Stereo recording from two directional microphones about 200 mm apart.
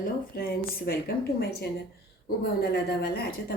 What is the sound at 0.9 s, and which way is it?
Speech, 50° left (ahead or behind).